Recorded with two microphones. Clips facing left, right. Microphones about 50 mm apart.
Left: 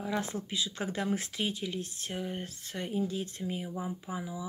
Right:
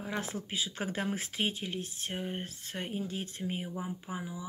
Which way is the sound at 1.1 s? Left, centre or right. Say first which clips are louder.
Left 3 dB; centre.